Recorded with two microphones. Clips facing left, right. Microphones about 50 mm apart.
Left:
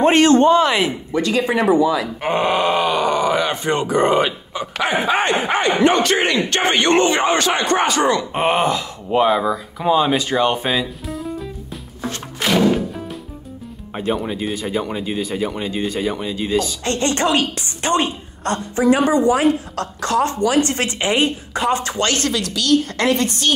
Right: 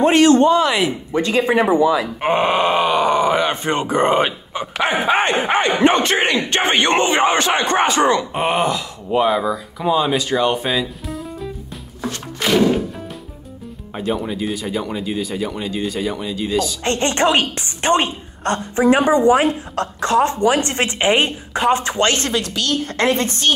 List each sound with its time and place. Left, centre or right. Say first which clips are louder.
0.0 s speech: even; left
1.1 s a woman's voice: right 2 dB; right
8.4 s speech: left 1 dB; left
12.4 s music: right 1 dB; centre
14.5 s speech: left 1 dB; left
16.8 s a woman's voice: right 2 dB; right